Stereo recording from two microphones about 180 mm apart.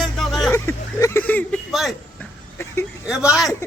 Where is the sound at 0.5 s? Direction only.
15° left (ahead or behind); by 2.0 s centre (ahead or behind).